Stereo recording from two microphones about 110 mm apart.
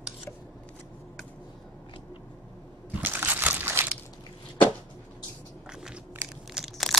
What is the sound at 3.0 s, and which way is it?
Crumpling, 15° right (ahead or behind).